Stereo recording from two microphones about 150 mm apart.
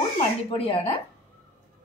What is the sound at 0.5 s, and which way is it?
Speech, 40° left (ahead or behind).